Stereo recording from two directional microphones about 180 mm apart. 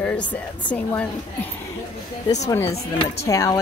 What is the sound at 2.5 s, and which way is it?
Speech, 15° left (ahead or behind).